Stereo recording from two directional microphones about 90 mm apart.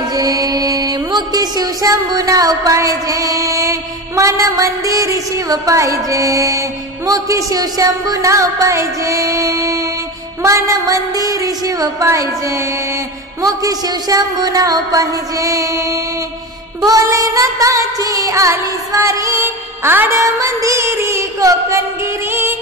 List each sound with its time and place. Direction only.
0.1 s music: 45° right (ahead or behind); by 20.2 s 25° right (ahead or behind)
20.2 s music: 35° right (ahead or behind)